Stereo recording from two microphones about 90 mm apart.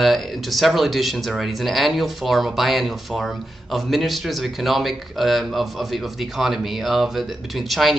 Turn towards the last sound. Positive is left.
turn(degrees=0)  # may be behind; listen again after turning